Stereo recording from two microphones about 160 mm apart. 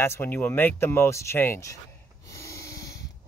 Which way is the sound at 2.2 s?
20° left (ahead or behind).